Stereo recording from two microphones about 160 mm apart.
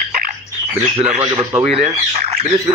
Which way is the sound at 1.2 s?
25° right (ahead or behind).